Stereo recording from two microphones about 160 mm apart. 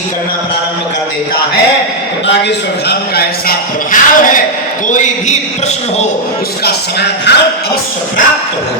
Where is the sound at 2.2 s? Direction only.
90° left; by 6.0 s 45° left (ahead or behind).